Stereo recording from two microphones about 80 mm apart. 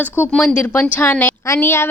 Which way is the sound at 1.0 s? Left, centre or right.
Left.